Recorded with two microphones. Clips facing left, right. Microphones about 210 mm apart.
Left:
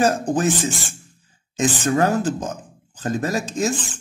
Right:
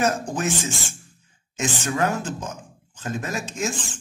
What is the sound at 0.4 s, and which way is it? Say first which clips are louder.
Speech: left 5 dB; 35° left (ahead or behind).